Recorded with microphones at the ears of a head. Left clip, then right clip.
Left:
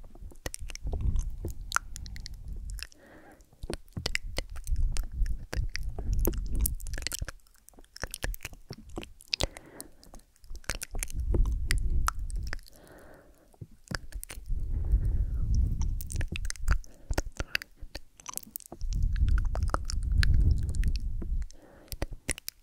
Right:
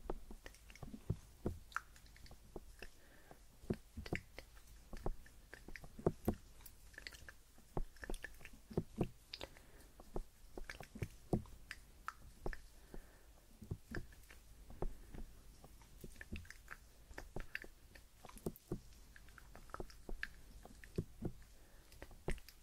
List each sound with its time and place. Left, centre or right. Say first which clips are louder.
0.4 s chewing: left 15 dB; left
7.9 s biting: left 12 dB; left
9.3 s chewing: left 19 dB; left
10.7 s a sound: left 16 dB; left
17.4 s whispering: left 12 dB; left
18.5 s a sound: left 4 dB; left
19.9 s chewing: left 14 dB; left